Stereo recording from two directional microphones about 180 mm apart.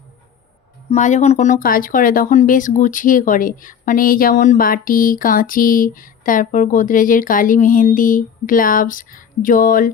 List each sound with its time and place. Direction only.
0.9 s speech: 40° left (ahead or behind)